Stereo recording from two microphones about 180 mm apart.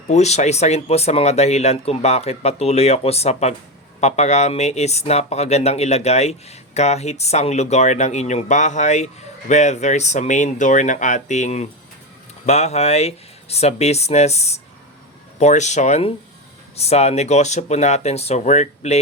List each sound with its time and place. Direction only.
0.1 s speech: 40° left (ahead or behind)